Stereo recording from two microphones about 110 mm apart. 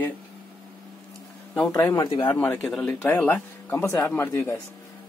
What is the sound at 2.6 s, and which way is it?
Speech, 5° left (ahead or behind).